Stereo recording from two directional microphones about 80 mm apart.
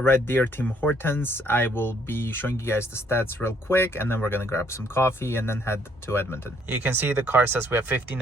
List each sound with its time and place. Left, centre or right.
0.0 s speech: left
6.7 s speech: right